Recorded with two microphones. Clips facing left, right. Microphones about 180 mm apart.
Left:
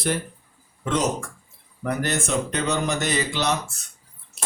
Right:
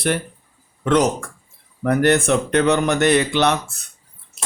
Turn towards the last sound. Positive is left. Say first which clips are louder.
# right 8 dB
turn(degrees=-65)  # may be behind; listen again after turning